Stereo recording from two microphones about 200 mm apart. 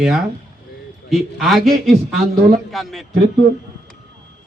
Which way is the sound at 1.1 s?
Centre (ahead or behind).